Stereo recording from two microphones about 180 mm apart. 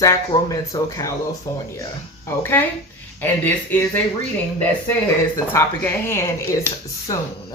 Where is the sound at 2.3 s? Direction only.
10° left (ahead or behind).